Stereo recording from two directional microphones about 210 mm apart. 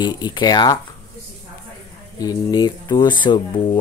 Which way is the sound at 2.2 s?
20° left (ahead or behind).